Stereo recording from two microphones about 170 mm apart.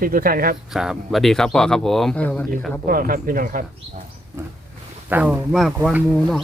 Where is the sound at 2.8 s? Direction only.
55° right (ahead or behind).